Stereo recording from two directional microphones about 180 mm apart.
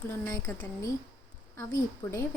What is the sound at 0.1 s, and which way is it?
Speech, 15° left (ahead or behind).